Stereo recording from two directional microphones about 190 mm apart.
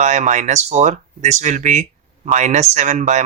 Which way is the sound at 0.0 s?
40° right (ahead or behind).